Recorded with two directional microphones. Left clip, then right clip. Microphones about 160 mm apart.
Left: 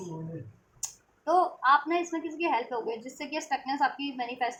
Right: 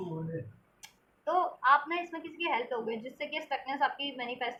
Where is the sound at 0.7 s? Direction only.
40° left (ahead or behind).